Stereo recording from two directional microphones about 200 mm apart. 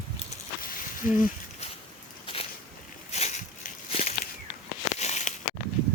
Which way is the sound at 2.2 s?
30° left (ahead or behind).